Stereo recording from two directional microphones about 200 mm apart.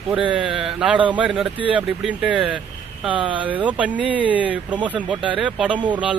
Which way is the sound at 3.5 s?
5° right (ahead or behind).